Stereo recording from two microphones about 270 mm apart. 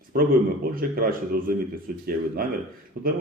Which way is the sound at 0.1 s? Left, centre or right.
Right.